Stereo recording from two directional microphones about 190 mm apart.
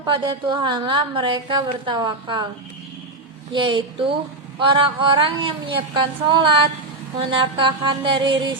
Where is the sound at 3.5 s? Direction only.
25° right (ahead or behind).